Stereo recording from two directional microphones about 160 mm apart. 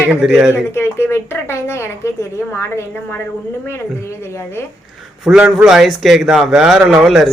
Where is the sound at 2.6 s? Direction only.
15° left (ahead or behind).